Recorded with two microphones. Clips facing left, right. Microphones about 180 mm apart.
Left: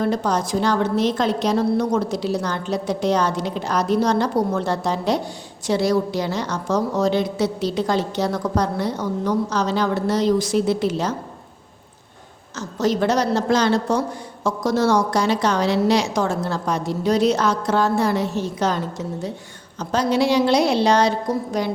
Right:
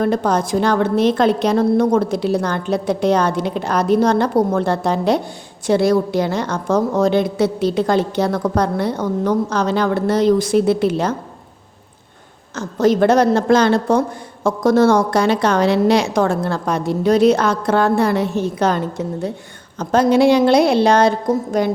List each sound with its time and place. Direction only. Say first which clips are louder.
0.0 s a woman's voice: right 4 dB; 55° right (ahead or behind)
12.5 s a woman's voice: right 6 dB; 55° right (ahead or behind)